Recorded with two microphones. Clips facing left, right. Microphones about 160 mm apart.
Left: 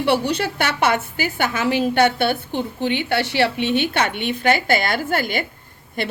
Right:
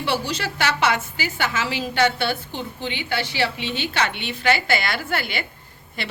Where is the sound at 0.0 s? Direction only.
60° left (ahead or behind).